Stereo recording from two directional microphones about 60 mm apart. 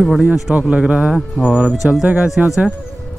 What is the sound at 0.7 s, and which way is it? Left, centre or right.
Speech, right.